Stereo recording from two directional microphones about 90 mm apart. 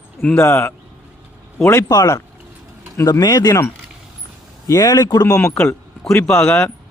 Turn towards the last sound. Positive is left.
turn(degrees=25)  # may be behind; listen again after turning